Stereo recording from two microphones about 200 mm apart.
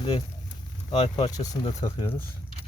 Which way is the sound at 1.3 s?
20° left (ahead or behind).